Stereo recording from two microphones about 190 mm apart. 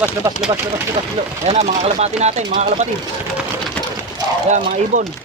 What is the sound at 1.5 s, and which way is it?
Speech, 30° right (ahead or behind).